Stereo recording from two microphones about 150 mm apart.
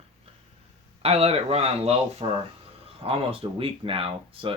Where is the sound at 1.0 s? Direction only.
45° right (ahead or behind).